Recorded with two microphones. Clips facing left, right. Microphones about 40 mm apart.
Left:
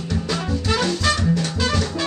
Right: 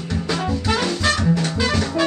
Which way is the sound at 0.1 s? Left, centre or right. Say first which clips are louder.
Right 2 dB; centre.